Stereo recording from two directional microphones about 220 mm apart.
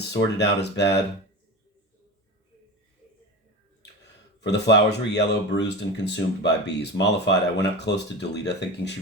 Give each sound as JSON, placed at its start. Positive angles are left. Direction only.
{"t": 0.1, "sound": "speech", "side_deg": 50}
{"t": 4.0, "sound": "speech", "side_deg": 50}